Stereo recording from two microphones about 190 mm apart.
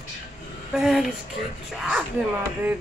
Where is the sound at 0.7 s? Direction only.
Centre (ahead or behind).